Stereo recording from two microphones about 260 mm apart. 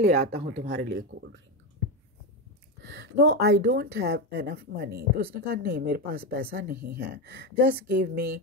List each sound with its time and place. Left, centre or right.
0.0 s speech: right
2.8 s speech: right